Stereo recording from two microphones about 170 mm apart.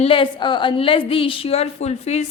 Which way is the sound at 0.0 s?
30° left (ahead or behind).